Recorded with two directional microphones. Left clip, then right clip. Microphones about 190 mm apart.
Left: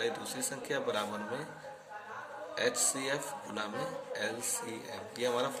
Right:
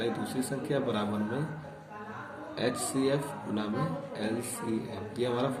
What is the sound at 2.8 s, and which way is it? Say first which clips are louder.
Speech: right 4 dB; 45° left (ahead or behind).